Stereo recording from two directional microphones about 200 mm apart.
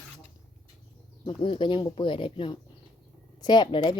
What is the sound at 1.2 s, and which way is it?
Speech, 25° left (ahead or behind).